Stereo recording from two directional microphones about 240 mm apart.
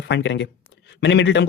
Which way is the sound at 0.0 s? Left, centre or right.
Left.